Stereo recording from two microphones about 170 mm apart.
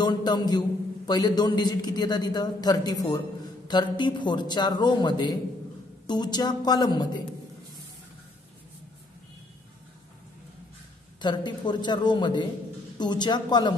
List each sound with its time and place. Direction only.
0.0 s a man's voice: 25° left (ahead or behind)
11.1 s a man's voice: 25° left (ahead or behind)